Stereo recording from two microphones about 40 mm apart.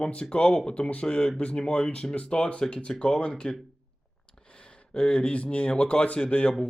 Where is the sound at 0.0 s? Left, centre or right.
Left.